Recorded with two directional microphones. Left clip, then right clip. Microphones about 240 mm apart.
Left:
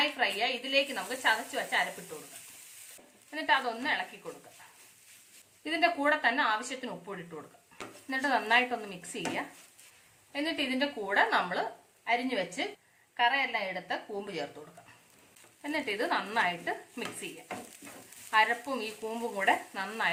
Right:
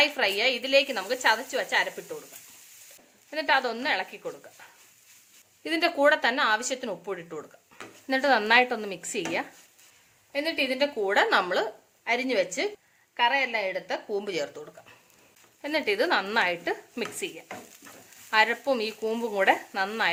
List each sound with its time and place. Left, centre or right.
0.0 s a woman's voice: right
3.2 s a woman's voice: right
5.6 s a woman's voice: right
8.0 s a woman's voice: right
15.6 s a woman's voice: right
18.3 s a woman's voice: right